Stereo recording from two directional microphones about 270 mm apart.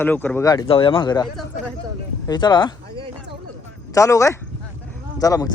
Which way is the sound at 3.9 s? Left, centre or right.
Centre.